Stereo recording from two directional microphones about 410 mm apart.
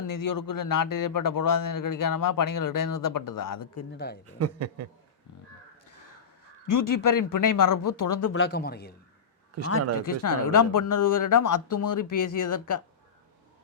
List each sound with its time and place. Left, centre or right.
0.1 s speech: left
3.9 s speech: left
4.4 s a man's voice: right
6.7 s speech: left
8.3 s speech: left
9.6 s a man's voice: right
10.0 s speech: left